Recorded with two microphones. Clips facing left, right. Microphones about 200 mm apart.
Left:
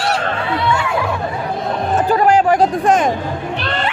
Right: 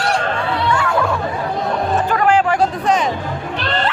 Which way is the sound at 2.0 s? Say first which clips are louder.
Left 4 dB; 35° left (ahead or behind).